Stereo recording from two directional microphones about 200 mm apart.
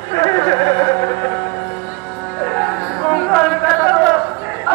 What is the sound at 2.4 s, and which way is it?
Music, 5° left (ahead or behind).